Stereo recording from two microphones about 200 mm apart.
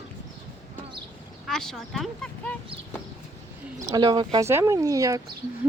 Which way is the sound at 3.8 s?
20° right (ahead or behind).